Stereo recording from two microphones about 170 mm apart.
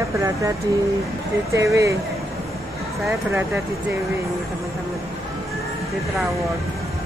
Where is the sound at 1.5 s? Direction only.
20° right (ahead or behind).